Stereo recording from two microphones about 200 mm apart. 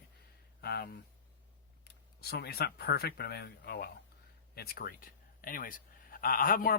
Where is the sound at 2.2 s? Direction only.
50° left (ahead or behind).